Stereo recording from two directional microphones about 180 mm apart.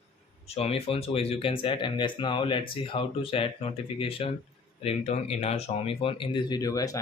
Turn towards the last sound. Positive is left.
turn(degrees=20)  # may be behind; listen again after turning